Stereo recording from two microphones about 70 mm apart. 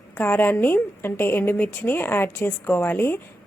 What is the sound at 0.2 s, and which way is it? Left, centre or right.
A woman's voice, left.